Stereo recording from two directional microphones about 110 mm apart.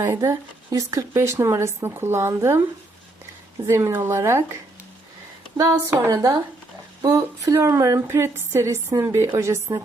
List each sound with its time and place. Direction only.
0.0 s speech: 25° right (ahead or behind)
3.7 s speech: 25° right (ahead or behind)
5.5 s speech: 30° right (ahead or behind)
6.1 s speech: 35° right (ahead or behind)